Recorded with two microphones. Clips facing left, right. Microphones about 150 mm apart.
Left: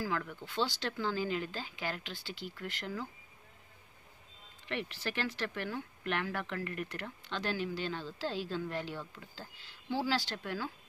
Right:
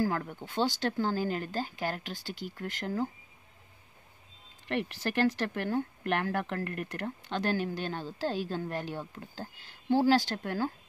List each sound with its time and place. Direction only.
0.0 s speech: 45° right (ahead or behind)
4.6 s speech: 50° right (ahead or behind)